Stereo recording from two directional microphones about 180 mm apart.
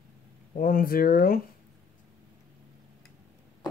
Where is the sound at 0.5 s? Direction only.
50° left (ahead or behind).